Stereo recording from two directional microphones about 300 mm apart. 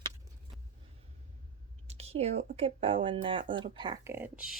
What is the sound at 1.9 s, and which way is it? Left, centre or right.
Speech, right.